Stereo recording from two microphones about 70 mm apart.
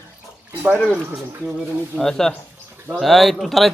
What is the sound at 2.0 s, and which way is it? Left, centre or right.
A man's voice, centre.